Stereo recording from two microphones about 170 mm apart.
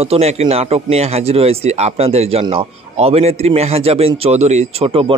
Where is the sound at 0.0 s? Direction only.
35° right (ahead or behind).